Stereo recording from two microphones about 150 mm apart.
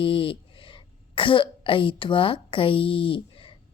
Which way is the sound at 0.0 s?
35° left (ahead or behind).